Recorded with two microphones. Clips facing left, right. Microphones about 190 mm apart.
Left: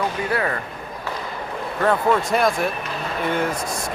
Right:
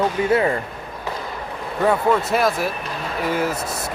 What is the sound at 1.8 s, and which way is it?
Speech, 5° right (ahead or behind).